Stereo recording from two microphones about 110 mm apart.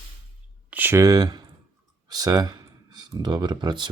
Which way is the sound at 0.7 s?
20° right (ahead or behind).